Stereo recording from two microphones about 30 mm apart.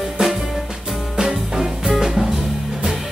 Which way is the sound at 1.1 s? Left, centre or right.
Centre.